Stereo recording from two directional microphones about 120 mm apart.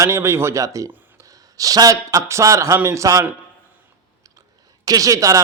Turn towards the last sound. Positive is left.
turn(degrees=-30)  # may be behind; listen again after turning